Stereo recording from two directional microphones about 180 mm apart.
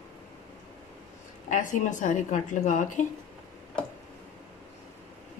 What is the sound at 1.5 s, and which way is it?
A woman's voice, 45° left (ahead or behind).